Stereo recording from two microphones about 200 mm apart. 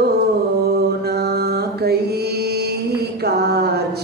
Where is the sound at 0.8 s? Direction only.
55° right (ahead or behind).